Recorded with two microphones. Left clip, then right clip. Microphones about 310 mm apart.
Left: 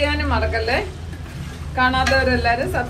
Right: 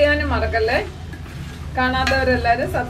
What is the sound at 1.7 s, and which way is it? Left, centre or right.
Speech, left.